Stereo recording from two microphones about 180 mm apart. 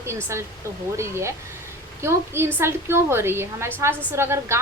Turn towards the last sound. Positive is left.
turn(degrees=-15)  # may be behind; listen again after turning